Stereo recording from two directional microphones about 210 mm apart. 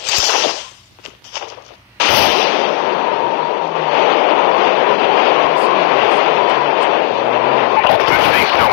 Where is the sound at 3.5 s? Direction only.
45° left (ahead or behind).